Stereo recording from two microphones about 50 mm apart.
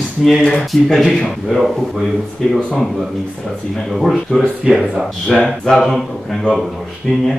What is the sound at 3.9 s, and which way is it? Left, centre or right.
Speech, centre.